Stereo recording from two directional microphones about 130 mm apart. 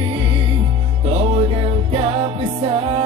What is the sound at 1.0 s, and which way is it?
Music, 50° right (ahead or behind).